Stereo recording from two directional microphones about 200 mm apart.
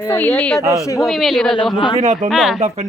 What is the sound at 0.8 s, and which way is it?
Speech, 15° left (ahead or behind).